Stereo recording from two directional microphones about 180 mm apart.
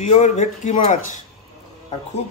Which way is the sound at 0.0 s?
40° left (ahead or behind).